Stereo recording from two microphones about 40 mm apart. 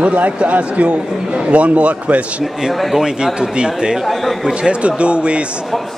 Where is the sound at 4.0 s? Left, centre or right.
Centre.